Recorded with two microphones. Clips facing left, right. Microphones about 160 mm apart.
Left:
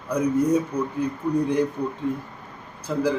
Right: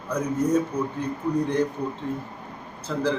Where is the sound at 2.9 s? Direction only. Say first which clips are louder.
Left 3 dB; 15° left (ahead or behind).